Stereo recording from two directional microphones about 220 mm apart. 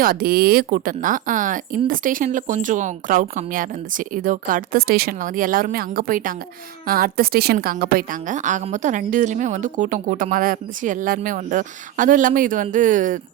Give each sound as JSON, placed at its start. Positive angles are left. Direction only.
{"t": 0.0, "sound": "a woman's voice", "side_deg": -40}